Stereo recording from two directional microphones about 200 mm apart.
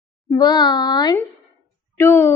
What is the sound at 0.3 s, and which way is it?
A woman's voice, 20° left (ahead or behind).